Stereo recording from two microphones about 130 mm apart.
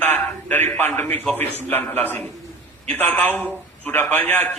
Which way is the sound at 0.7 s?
15° left (ahead or behind).